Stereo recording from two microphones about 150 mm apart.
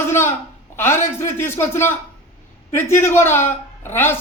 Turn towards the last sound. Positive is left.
turn(degrees=15)  # may be behind; listen again after turning